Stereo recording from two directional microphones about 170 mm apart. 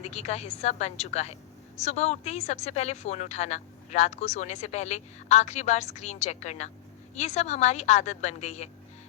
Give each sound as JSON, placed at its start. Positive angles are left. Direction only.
{"t": 0.0, "sound": "a woman's voice", "side_deg": 40}